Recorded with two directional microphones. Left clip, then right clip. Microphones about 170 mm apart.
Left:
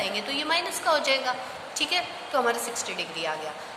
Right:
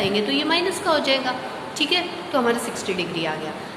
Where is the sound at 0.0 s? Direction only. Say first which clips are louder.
Right 7 dB; 25° left (ahead or behind).